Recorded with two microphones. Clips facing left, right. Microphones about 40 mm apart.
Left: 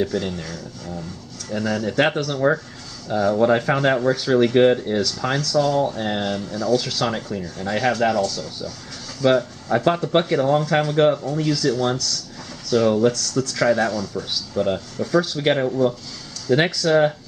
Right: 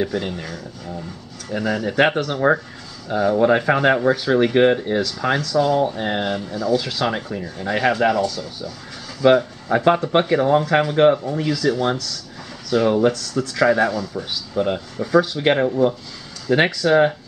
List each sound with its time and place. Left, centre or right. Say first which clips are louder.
0.0 s speech: even; centre